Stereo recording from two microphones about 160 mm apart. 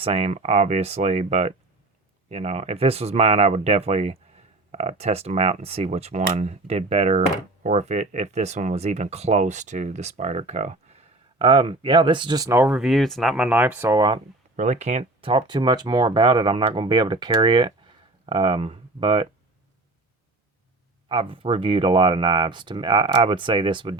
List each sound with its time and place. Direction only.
0.0 s speech: 40° right (ahead or behind); by 14.2 s 25° right (ahead or behind)
14.5 s speech: 50° right (ahead or behind); by 19.3 s 35° right (ahead or behind)
21.1 s speech: 35° right (ahead or behind)